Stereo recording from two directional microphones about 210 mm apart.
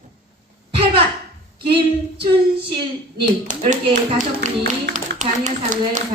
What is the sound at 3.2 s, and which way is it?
Speech, 35° right (ahead or behind).